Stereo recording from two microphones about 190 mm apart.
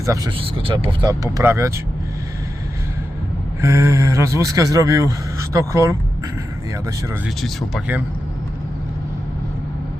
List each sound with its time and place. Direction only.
0.3 s speech: 30° right (ahead or behind)
3.6 s speech: 15° right (ahead or behind)
7.4 s speech: 5° right (ahead or behind)